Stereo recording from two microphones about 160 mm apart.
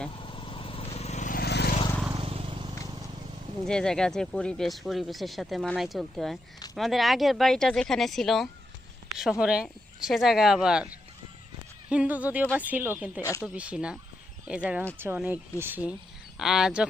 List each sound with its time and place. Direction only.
0.1 s vehicle: 30° left (ahead or behind); by 1.4 s 50° left (ahead or behind)
1.4 s vehicle: 85° left
2.1 s vehicle: 35° right (ahead or behind)
3.7 s speech: 5° left (ahead or behind)
11.9 s speech: 10° right (ahead or behind)
13.2 s speech: 20° left (ahead or behind)
13.5 s speech: 10° right (ahead or behind)